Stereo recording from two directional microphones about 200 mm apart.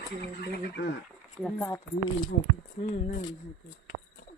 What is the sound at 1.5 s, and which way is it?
Speech, 10° left (ahead or behind).